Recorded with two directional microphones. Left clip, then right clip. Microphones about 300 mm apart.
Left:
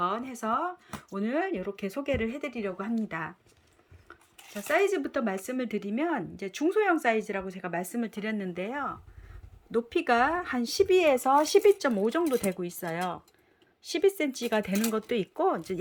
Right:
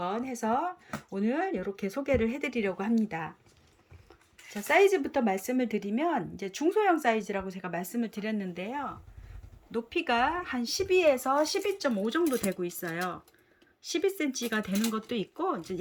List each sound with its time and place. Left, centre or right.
0.0 s speech: centre
4.7 s speech: centre